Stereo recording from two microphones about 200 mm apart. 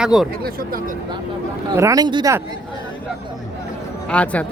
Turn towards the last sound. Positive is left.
turn(degrees=5)  # may be behind; listen again after turning